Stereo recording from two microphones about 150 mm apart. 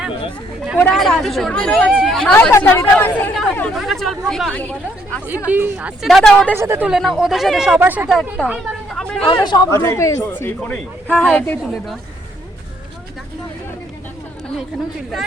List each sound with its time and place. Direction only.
0.8 s speech: 5° left (ahead or behind)
2.3 s speech: 15° left (ahead or behind)
5.5 s speech: 10° right (ahead or behind)
6.1 s speech: 5° left (ahead or behind)
6.5 s speech: 15° right (ahead or behind)
6.8 s speech: 5° right (ahead or behind)
8.4 s chatter: 5° right (ahead or behind)
9.2 s speech: 30° left (ahead or behind)
9.7 s speech: 20° left (ahead or behind)